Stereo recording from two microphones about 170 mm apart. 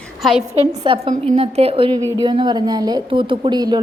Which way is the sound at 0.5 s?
40° right (ahead or behind).